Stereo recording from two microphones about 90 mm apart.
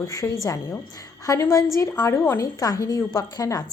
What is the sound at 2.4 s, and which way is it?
A woman's voice, 45° left (ahead or behind).